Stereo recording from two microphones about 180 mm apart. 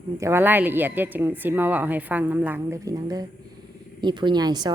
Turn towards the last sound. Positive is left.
turn(degrees=-20)  # may be behind; listen again after turning